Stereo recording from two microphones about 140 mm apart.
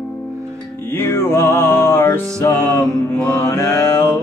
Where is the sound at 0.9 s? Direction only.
15° left (ahead or behind).